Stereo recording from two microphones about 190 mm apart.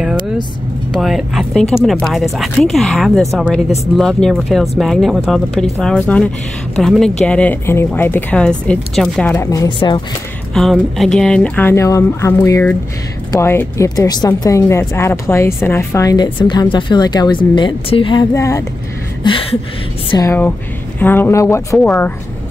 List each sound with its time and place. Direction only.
0.9 s speech: centre (ahead or behind)
9.3 s speech: 15° left (ahead or behind)
10.5 s speech: centre (ahead or behind); by 18.6 s 15° left (ahead or behind)
19.2 s speech: 25° left (ahead or behind)
20.1 s speech: 15° left (ahead or behind)